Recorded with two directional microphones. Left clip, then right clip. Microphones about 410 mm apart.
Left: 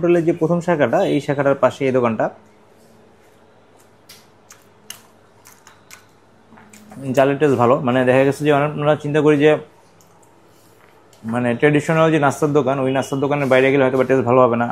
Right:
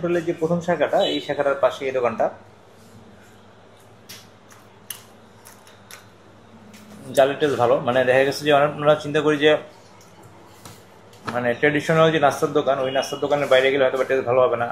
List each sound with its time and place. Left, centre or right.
0.0 s a man's voice: left
7.1 s speech: left
11.3 s a man's voice: left